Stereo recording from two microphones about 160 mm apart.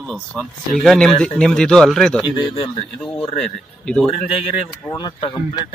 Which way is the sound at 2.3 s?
30° left (ahead or behind).